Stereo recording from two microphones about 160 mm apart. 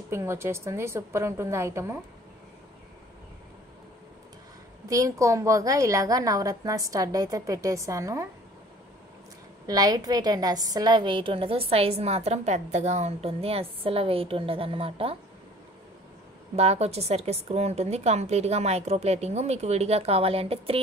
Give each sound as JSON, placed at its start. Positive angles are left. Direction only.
{"t": 0.1, "sound": "a woman's voice", "side_deg": -15}
{"t": 4.8, "sound": "a woman's voice", "side_deg": -20}
{"t": 9.7, "sound": "a woman's voice", "side_deg": -25}
{"t": 16.5, "sound": "a woman's voice", "side_deg": -40}